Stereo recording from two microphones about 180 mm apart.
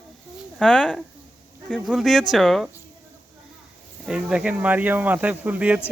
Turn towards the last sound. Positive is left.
turn(degrees=-10)  # may be behind; listen again after turning